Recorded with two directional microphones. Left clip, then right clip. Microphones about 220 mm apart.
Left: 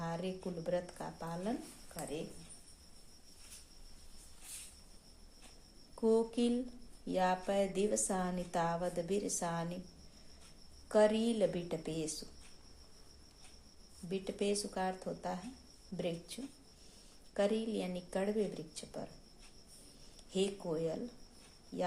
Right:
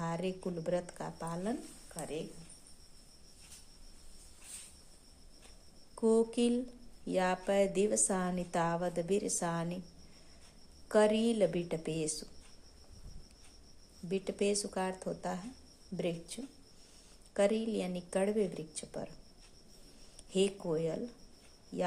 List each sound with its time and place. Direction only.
0.0 s a woman's voice: 25° right (ahead or behind)
6.0 s a woman's voice: 25° right (ahead or behind)
10.8 s a woman's voice: 25° right (ahead or behind)
14.1 s a woman's voice: 25° right (ahead or behind)
20.3 s a woman's voice: 25° right (ahead or behind)